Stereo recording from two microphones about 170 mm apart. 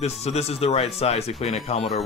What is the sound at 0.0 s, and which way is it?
Speech, 40° left (ahead or behind).